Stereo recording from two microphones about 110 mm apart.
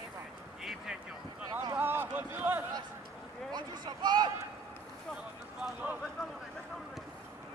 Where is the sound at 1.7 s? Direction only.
20° right (ahead or behind).